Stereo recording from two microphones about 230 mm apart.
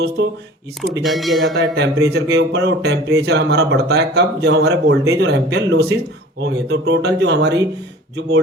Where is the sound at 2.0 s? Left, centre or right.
Right.